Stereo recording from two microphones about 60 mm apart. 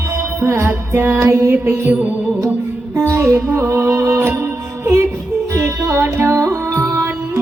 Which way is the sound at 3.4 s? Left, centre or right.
Right.